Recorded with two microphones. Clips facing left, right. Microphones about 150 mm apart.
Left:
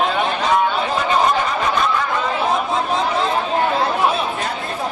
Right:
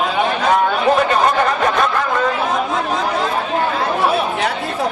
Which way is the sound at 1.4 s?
60° right (ahead or behind).